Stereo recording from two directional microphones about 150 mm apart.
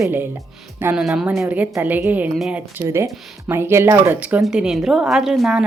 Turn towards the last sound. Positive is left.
turn(degrees=0)  # may be behind; listen again after turning